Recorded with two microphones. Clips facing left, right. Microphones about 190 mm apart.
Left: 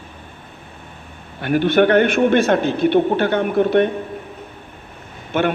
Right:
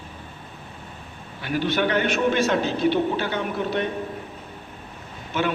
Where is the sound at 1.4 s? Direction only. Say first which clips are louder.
Left 9 dB; 55° left (ahead or behind).